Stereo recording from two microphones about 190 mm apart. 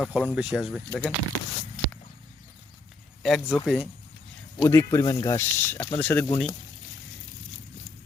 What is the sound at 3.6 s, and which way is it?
Speech, 5° right (ahead or behind).